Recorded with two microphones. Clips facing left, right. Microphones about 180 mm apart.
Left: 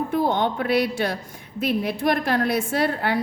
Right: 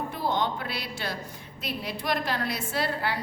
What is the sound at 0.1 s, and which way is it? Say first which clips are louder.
A woman's voice: left 6 dB; 55° left (ahead or behind).